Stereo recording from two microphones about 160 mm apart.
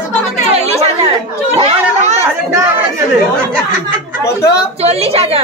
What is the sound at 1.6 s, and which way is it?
Chatter, 45° right (ahead or behind).